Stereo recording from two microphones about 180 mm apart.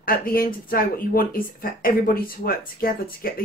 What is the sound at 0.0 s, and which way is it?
Speech, 55° left (ahead or behind).